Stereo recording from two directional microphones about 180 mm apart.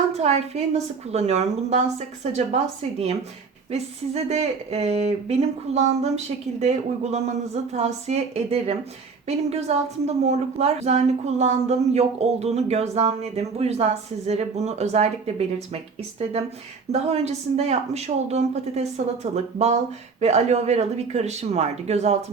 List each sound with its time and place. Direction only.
0.1 s a woman's voice: 35° right (ahead or behind)
3.7 s a woman's voice: 35° right (ahead or behind)
16.9 s a woman's voice: 35° right (ahead or behind)